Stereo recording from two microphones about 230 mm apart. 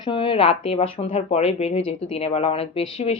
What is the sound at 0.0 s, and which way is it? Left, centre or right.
Speech, left.